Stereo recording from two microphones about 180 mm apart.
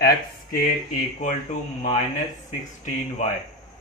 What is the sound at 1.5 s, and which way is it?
Speech, 45° left (ahead or behind).